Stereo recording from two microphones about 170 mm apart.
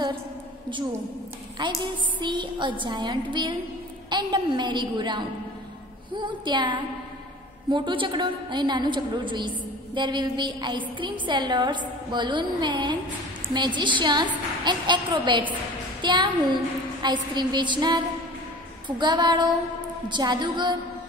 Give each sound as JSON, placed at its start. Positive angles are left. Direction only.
{"t": 1.6, "sound": "a woman's voice", "side_deg": -25}